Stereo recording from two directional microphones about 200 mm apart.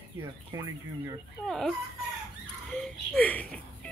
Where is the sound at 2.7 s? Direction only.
5° left (ahead or behind).